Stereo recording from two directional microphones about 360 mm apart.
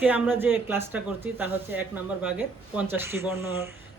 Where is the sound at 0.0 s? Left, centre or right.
Centre.